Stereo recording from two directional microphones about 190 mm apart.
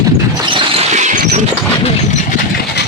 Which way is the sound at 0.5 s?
35° right (ahead or behind).